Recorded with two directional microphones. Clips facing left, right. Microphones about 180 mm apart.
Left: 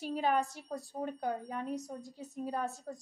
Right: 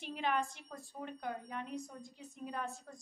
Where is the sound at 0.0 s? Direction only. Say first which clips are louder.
Left 5 dB; 40° left (ahead or behind).